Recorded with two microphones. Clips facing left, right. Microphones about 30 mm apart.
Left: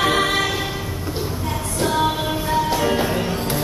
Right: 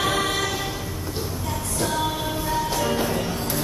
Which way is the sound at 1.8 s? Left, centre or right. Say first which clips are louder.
Left 6 dB; left.